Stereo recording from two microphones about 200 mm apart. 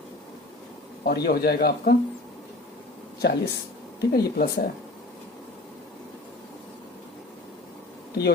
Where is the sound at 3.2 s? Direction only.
55° left (ahead or behind).